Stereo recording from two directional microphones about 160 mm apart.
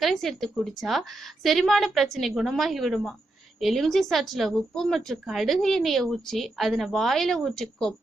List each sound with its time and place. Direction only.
0.0 s speech: centre (ahead or behind)